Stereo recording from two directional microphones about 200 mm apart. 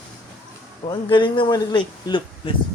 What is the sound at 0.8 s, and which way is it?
Speech, 25° left (ahead or behind).